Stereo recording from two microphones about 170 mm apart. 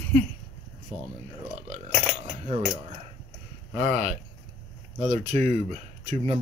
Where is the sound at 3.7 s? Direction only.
40° right (ahead or behind).